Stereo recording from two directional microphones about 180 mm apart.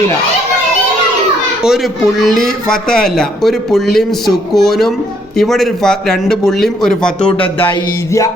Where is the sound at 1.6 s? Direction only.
5° right (ahead or behind).